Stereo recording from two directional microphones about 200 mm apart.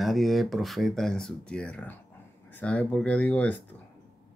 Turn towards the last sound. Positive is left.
turn(degrees=10)  # may be behind; listen again after turning